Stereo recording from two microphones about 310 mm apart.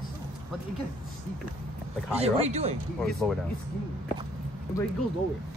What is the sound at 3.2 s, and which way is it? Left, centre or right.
Speech, centre.